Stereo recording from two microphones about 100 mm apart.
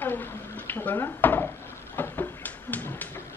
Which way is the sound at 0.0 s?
20° left (ahead or behind).